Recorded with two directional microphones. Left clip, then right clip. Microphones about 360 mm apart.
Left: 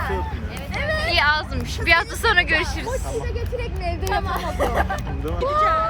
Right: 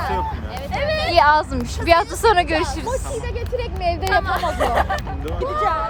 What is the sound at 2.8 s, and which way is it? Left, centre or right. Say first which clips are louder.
Speech: right 2 dB; right.